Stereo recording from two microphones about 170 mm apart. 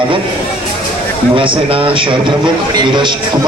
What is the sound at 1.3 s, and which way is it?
A man's voice, 30° right (ahead or behind).